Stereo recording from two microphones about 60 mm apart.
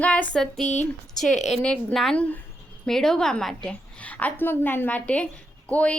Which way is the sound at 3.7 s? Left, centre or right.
Left.